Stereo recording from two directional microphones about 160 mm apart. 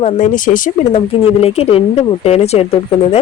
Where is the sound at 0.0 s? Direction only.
50° left (ahead or behind).